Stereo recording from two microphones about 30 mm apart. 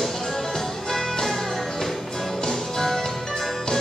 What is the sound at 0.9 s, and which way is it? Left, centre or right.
Music, centre.